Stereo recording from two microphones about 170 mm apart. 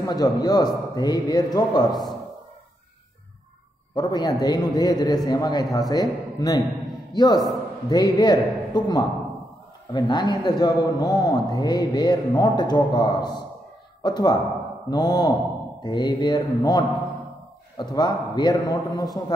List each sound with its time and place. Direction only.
0.0 s speech: 20° left (ahead or behind)
1.9 s speech: centre (ahead or behind)
3.9 s a man's voice: 25° left (ahead or behind)